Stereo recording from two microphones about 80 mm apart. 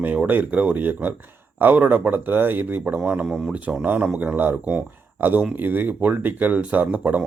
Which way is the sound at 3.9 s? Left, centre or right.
Centre.